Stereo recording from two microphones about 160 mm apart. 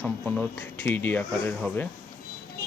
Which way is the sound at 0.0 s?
10° left (ahead or behind).